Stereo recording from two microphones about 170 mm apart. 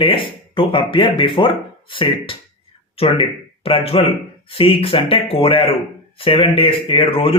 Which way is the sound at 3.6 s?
35° left (ahead or behind).